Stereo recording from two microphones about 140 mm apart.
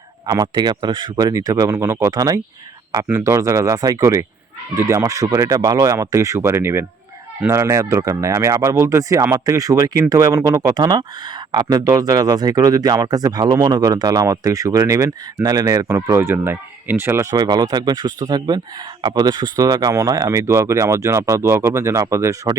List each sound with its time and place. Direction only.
0.3 s speech: 25° right (ahead or behind)
17.3 s speech: 30° right (ahead or behind)